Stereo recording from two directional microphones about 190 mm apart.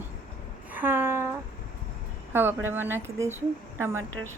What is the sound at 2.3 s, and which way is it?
Speech, 10° right (ahead or behind).